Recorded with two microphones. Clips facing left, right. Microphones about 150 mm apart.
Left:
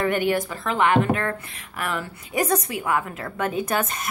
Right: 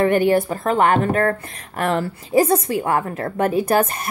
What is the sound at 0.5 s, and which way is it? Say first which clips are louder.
A woman's voice: right 4 dB; 40° right (ahead or behind).